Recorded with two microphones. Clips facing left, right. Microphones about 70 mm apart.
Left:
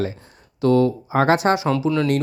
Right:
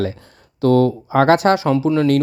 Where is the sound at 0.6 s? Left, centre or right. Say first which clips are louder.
Right 2 dB; right.